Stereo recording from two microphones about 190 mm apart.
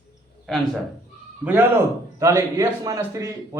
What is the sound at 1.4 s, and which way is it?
A man's voice, 10° right (ahead or behind).